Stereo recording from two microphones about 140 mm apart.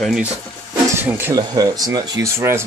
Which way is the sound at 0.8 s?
15° right (ahead or behind).